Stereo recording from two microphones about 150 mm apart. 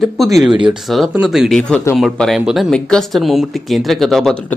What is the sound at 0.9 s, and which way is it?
Speech, centre (ahead or behind).